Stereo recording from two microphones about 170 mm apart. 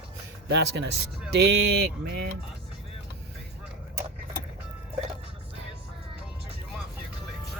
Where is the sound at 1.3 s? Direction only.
75° right (ahead or behind).